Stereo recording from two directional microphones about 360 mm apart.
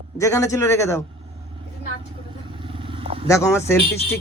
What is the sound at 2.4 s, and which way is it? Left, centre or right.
Vehicle, centre.